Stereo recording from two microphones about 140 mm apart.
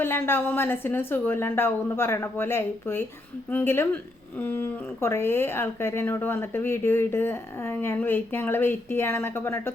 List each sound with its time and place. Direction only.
0.0 s speech: 15° left (ahead or behind)